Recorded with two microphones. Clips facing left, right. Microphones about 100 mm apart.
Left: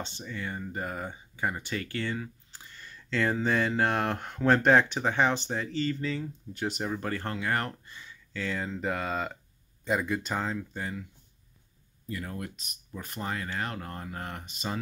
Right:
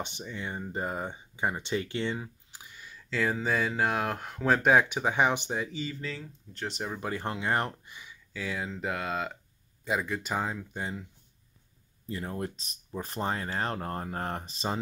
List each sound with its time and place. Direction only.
0.0 s speech: 15° right (ahead or behind)
5.9 s speech: centre (ahead or behind)
10.3 s speech: 10° right (ahead or behind)
12.1 s speech: 30° right (ahead or behind)